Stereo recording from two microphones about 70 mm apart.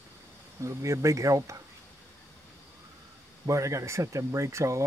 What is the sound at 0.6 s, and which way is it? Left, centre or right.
Speech, right.